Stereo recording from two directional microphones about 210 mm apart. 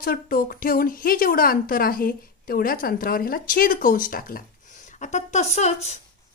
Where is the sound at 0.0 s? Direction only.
45° left (ahead or behind).